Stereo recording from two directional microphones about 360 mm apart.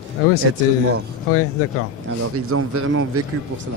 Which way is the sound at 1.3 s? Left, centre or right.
Left.